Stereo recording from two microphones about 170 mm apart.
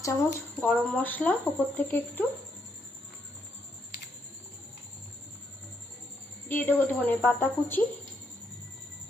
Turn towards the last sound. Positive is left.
turn(degrees=10)  # may be behind; listen again after turning